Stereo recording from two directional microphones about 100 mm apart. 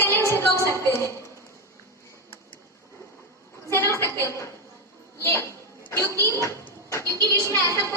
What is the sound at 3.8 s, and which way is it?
Speech, 25° left (ahead or behind).